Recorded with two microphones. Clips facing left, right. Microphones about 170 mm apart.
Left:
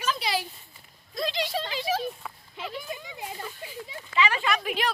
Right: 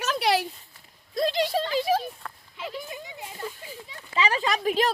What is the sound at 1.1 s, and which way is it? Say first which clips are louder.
Speech: right 5 dB; 50° right (ahead or behind).